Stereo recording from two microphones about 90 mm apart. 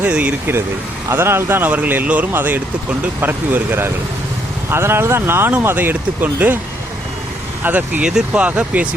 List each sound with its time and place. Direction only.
0.0 s speech: 15° right (ahead or behind)
1.1 s speech: 25° right (ahead or behind)
7.6 s speech: 20° right (ahead or behind)